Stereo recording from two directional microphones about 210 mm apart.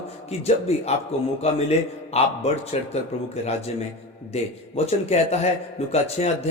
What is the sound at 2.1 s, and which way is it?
Speech, 30° left (ahead or behind).